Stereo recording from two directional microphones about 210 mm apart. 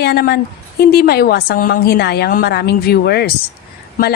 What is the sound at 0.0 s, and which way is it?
A woman's voice, 50° left (ahead or behind).